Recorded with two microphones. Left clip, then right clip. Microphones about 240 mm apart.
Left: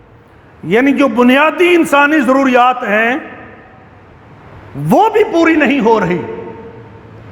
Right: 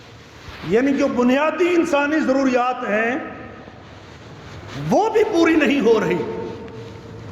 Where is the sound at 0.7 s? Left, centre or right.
Left.